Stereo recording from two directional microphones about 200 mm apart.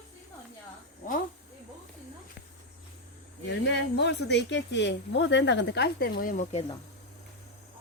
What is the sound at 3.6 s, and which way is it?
Speech, 60° left (ahead or behind).